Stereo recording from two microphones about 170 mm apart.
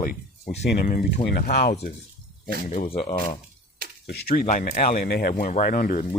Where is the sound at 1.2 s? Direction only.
65° left (ahead or behind).